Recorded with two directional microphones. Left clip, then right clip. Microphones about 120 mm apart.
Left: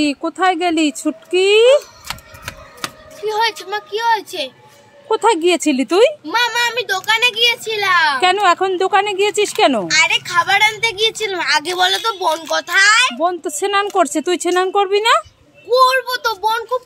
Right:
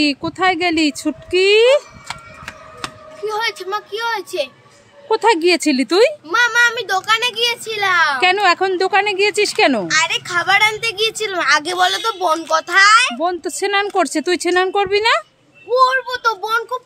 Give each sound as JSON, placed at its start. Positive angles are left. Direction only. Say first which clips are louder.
{"t": 0.0, "sound": "speech", "louder": "even", "side_deg": -5}
{"t": 2.0, "sound": "a sound", "louder": "left 1 dB", "side_deg": 30}
{"t": 3.3, "sound": "a child's voice", "louder": "left 3 dB", "side_deg": -30}
{"t": 5.0, "sound": "speech", "louder": "even", "side_deg": -5}
{"t": 6.2, "sound": "a child's voice", "louder": "right 3 dB", "side_deg": -30}
{"t": 8.2, "sound": "speech", "louder": "even", "side_deg": -5}
{"t": 9.8, "sound": "a child's voice", "louder": "left 3 dB", "side_deg": -30}
{"t": 13.2, "sound": "a woman's voice", "louder": "left 1 dB", "side_deg": -10}
{"t": 15.7, "sound": "a child's voice", "louder": "left 2 dB", "side_deg": 25}
{"t": 16.3, "sound": "a child's voice", "louder": "left 1 dB", "side_deg": -25}